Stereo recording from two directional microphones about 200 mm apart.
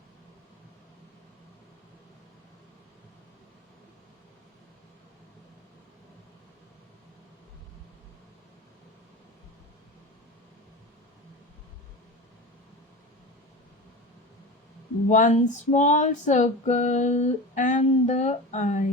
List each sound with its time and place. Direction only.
15.1 s female singing: 40° left (ahead or behind)